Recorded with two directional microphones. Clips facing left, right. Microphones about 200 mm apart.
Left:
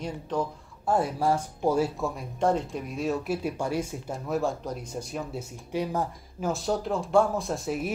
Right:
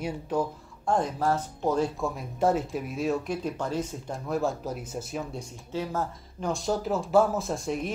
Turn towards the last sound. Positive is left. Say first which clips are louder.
# even
turn(degrees=0)  # may be behind; listen again after turning